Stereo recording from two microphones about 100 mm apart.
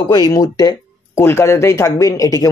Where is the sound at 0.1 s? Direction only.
40° left (ahead or behind).